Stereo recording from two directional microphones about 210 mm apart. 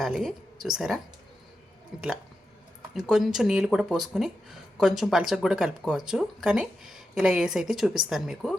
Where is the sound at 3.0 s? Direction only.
Centre (ahead or behind).